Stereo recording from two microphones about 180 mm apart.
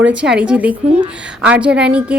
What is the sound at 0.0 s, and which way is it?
A woman's voice, 5° right (ahead or behind).